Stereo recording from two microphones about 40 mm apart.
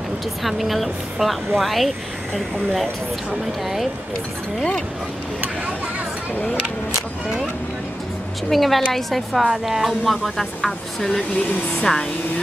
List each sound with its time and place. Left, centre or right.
0.4 s speech: centre
8.5 s speech: centre
9.4 s speech: centre